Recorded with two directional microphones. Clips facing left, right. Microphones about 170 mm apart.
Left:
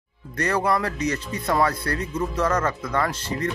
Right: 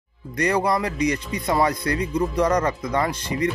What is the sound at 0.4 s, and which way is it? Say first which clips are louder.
A man's voice: right 2 dB; 15° right (ahead or behind).